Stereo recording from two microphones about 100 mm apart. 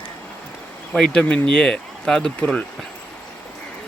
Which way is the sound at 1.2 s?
20° left (ahead or behind).